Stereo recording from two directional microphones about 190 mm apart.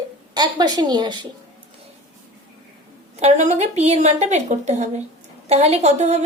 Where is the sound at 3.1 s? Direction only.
35° right (ahead or behind).